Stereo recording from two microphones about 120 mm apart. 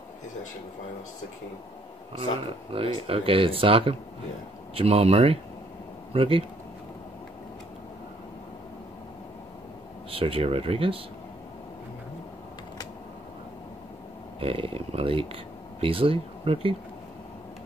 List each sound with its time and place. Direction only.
2.7 s speech: 50° right (ahead or behind)
10.1 s speech: 50° right (ahead or behind)
14.4 s speech: 50° right (ahead or behind)